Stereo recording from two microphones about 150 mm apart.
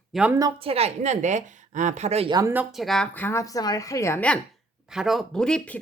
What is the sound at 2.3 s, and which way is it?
Speech, 25° right (ahead or behind).